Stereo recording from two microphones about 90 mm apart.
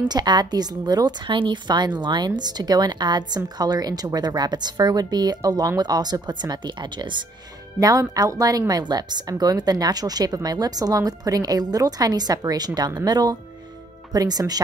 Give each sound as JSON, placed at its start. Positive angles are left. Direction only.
{"t": 0.1, "sound": "speech", "side_deg": -50}
{"t": 7.8, "sound": "speech", "side_deg": -40}